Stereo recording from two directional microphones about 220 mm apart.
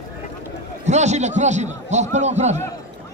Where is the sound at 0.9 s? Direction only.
30° right (ahead or behind).